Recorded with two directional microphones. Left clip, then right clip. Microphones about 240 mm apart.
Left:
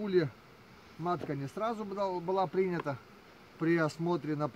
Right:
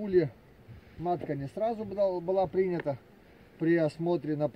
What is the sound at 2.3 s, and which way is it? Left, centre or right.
Speech, centre.